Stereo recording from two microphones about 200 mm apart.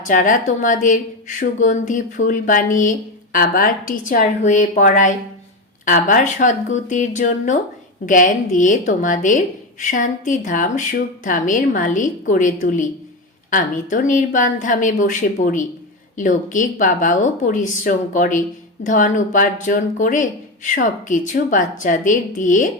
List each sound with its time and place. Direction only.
0.0 s speech: 40° left (ahead or behind)